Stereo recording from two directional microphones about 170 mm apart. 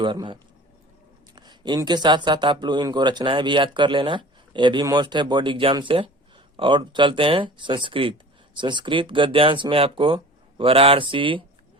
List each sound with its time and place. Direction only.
0.0 s speech: 30° right (ahead or behind)
1.4 s speech: 25° right (ahead or behind)